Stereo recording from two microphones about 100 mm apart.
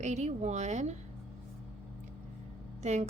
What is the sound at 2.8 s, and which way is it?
Speech, 90° right.